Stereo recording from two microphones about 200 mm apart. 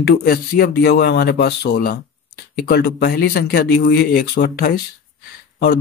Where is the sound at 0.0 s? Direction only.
50° left (ahead or behind).